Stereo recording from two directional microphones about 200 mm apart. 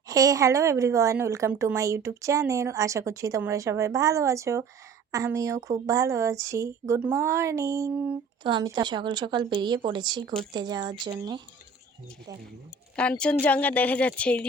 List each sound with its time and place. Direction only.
0.1 s a woman's voice: 15° right (ahead or behind)
13.0 s speech: 5° left (ahead or behind)